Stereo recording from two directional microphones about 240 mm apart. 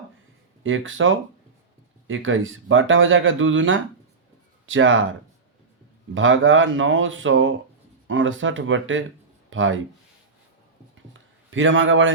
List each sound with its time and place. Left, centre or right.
0.6 s speech: right
6.1 s speech: right
10.9 s a sound: right